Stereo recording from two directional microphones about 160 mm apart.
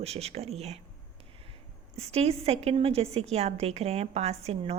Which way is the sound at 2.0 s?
40° right (ahead or behind).